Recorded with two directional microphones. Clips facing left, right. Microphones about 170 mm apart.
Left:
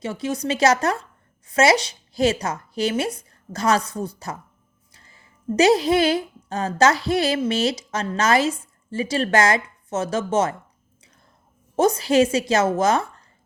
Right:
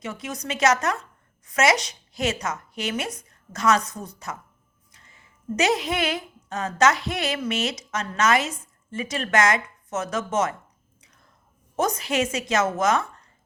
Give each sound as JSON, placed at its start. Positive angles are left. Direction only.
{"t": 0.0, "sound": "a woman's voice", "side_deg": 30}
{"t": 11.0, "sound": "chewing", "side_deg": 30}
{"t": 11.8, "sound": "speech", "side_deg": 30}